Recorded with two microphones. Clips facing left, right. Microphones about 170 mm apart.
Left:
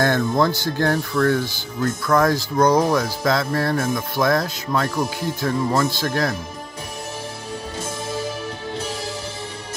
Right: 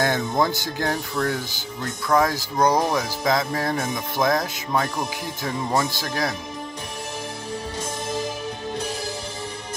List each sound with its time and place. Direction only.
0.0 s speech: 15° right (ahead or behind)